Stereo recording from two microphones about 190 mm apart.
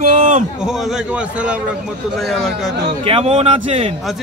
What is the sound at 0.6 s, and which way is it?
Speech, 5° right (ahead or behind).